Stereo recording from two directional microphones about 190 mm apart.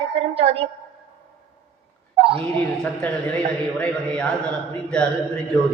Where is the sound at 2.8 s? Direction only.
5° left (ahead or behind).